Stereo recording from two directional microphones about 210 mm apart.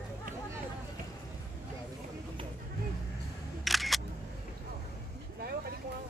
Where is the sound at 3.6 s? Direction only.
Centre (ahead or behind).